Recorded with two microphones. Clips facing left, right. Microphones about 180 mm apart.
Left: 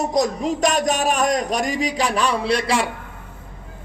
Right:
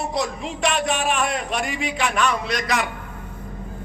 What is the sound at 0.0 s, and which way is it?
Speech, 40° left (ahead or behind).